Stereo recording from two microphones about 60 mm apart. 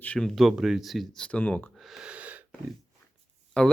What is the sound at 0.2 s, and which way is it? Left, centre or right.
Speech, centre.